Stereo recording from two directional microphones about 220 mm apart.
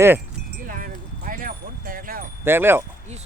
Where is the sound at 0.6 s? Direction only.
40° right (ahead or behind).